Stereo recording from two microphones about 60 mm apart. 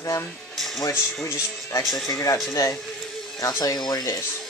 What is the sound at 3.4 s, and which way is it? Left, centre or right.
Speech, left.